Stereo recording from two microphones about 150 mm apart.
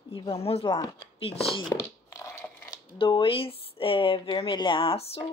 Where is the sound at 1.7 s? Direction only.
20° left (ahead or behind).